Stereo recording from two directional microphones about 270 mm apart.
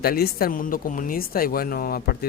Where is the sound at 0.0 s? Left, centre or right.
Left.